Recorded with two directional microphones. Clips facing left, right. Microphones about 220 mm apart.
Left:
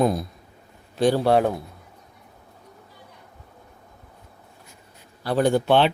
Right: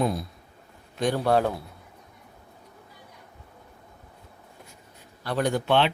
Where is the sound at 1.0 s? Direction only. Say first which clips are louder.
Left 4 dB; 30° left (ahead or behind).